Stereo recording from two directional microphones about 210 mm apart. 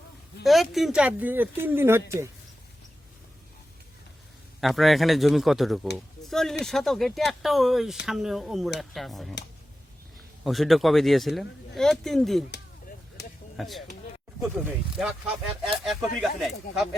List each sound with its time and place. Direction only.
0.4 s speech: centre (ahead or behind)
4.6 s speech: centre (ahead or behind)
10.4 s speech: centre (ahead or behind)
13.2 s a sound: 50° left (ahead or behind)
13.6 s speech: centre (ahead or behind)